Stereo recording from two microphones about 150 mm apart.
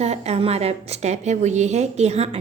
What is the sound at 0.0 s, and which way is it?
A woman's voice, 45° right (ahead or behind).